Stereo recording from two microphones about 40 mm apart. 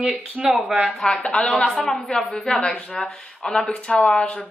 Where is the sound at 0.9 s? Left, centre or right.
Centre.